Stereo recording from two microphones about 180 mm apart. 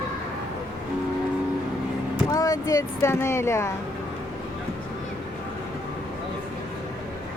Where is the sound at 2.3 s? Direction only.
20° left (ahead or behind).